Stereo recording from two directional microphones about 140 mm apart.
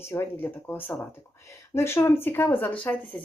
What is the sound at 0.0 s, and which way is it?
Speech, 20° left (ahead or behind).